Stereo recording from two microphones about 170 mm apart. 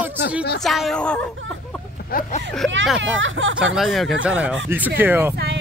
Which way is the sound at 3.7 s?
Centre (ahead or behind).